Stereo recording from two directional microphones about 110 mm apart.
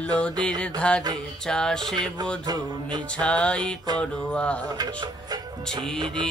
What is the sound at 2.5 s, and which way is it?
Music, 40° right (ahead or behind).